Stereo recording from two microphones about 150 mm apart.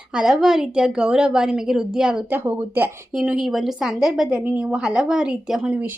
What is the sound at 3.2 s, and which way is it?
Speech, 5° right (ahead or behind).